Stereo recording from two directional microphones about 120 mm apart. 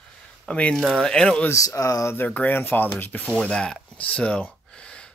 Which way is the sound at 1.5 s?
25° left (ahead or behind).